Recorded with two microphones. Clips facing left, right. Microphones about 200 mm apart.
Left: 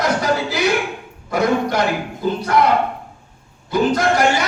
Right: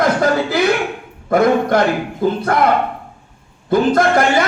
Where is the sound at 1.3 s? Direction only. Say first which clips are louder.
Right 5 dB; 55° right (ahead or behind).